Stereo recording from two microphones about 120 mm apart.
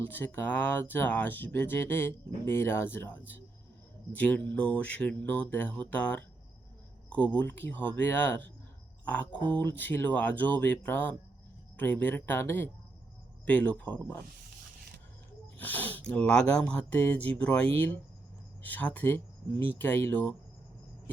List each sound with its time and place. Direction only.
0.0 s speech: 15° left (ahead or behind)
15.5 s speech: 15° left (ahead or behind)